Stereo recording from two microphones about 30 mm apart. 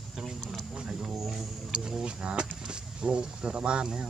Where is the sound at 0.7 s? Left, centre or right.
Right.